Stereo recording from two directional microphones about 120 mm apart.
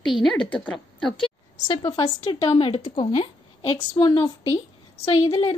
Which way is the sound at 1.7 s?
35° left (ahead or behind).